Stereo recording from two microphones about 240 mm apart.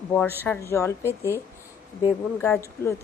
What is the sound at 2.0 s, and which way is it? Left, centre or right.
Speech, centre.